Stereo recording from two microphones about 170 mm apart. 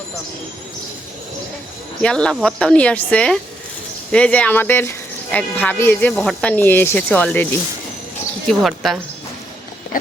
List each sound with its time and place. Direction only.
2.0 s speech: 5° left (ahead or behind)
8.4 s speech: centre (ahead or behind)
9.9 s a sound: 55° left (ahead or behind)